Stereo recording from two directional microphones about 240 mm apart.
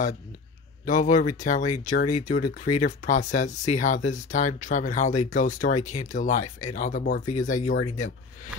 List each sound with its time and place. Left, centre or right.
0.8 s speech: left